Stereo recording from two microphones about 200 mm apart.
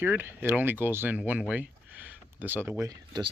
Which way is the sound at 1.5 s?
10° right (ahead or behind).